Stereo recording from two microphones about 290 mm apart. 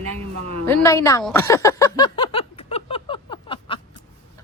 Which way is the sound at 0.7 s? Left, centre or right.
Centre.